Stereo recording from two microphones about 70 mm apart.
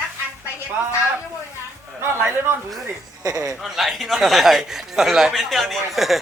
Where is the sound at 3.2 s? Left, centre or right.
Right.